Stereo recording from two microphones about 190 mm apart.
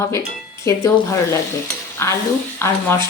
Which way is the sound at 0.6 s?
15° left (ahead or behind).